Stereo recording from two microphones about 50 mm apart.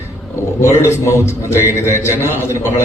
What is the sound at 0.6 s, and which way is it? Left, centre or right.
A man's voice, left.